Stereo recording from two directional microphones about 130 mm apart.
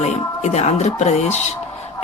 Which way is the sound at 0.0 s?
60° left (ahead or behind).